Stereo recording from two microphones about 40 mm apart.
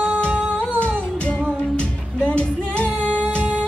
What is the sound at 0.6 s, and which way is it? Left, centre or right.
Music, left.